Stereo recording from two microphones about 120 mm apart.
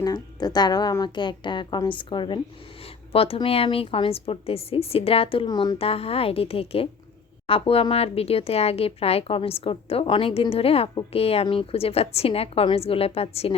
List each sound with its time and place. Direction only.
0.0 s a woman's voice: 35° left (ahead or behind); by 5.5 s 50° left (ahead or behind)
5.5 s a woman's voice: 35° left (ahead or behind)
5.8 s a woman's voice: 55° left (ahead or behind)